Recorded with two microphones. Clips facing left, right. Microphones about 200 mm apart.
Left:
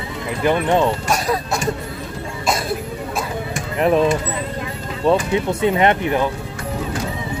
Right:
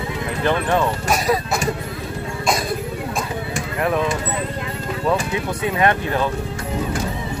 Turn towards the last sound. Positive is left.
turn(degrees=20)  # may be behind; listen again after turning